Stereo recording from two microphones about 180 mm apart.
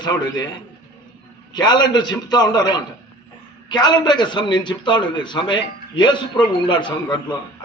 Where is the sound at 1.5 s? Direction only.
25° left (ahead or behind).